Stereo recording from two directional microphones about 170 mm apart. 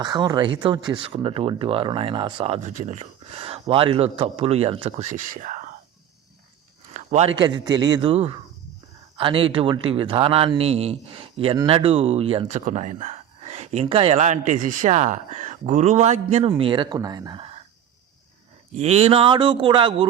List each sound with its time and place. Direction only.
0.0 s speech: 25° right (ahead or behind); by 5.6 s 50° right (ahead or behind)
6.9 s a sound: 40° right (ahead or behind)
7.3 s speech: 25° right (ahead or behind); by 16.5 s 40° right (ahead or behind)
16.5 s speech: 30° right (ahead or behind)
18.7 s speech: 40° right (ahead or behind)